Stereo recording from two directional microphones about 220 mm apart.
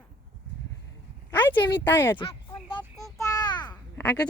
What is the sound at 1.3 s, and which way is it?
Speech, 10° left (ahead or behind).